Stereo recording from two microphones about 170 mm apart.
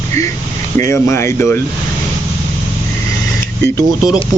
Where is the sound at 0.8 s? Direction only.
15° left (ahead or behind).